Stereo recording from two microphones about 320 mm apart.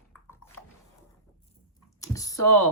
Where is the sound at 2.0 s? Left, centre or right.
Centre.